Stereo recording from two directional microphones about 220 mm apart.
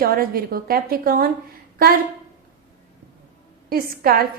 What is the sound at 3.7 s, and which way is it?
Speech, 45° right (ahead or behind).